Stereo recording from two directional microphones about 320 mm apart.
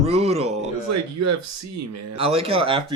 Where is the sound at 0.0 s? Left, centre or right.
Centre.